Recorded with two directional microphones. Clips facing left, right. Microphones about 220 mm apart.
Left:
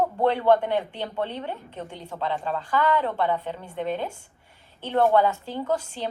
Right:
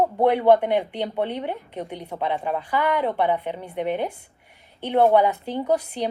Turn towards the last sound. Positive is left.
turn(degrees=-15)  # may be behind; listen again after turning